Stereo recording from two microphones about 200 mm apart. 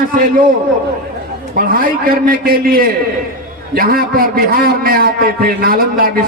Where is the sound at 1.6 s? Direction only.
45° right (ahead or behind).